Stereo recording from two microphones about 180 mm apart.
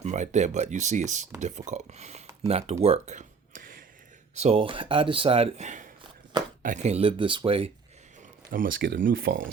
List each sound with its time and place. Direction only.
0.0 s speech: 40° right (ahead or behind)
2.8 s a sound: 35° right (ahead or behind); by 3.8 s 50° right (ahead or behind)
4.4 s speech: 35° right (ahead or behind)
8.4 s speech: 55° right (ahead or behind)